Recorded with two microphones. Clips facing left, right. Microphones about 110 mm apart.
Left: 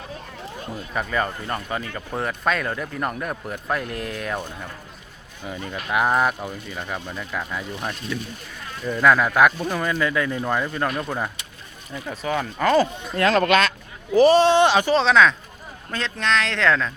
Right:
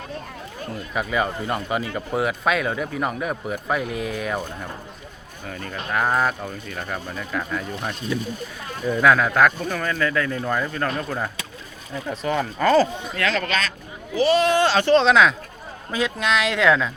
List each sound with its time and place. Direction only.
0.9 s speech: 5° right (ahead or behind)
5.5 s speech: 15° left (ahead or behind)
12.1 s speech: 5° left (ahead or behind)
13.1 s speech: 40° left (ahead or behind); by 13.7 s 60° left (ahead or behind)
14.2 s speech: 35° left (ahead or behind); by 14.9 s 15° left (ahead or behind)
14.9 s speech: centre (ahead or behind)